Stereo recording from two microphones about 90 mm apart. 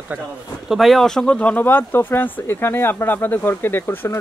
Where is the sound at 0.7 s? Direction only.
Centre (ahead or behind).